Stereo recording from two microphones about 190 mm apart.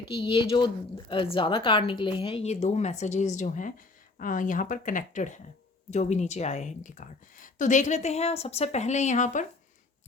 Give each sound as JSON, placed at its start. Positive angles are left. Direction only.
{"t": 0.2, "sound": "a woman's voice", "side_deg": 25}